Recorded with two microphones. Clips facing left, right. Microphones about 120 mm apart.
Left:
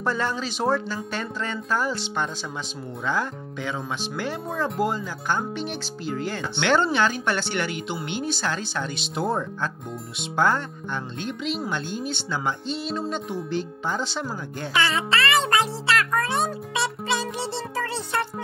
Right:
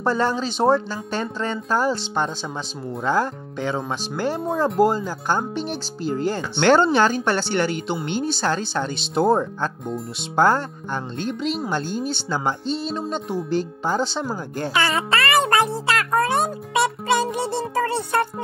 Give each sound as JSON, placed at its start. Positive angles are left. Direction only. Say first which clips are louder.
{"t": 0.0, "sound": "speech", "louder": "right 5 dB", "side_deg": -30}
{"t": 15.5, "sound": "music", "louder": "right 3 dB", "side_deg": -50}
{"t": 16.7, "sound": "music", "louder": "right 9 dB", "side_deg": -50}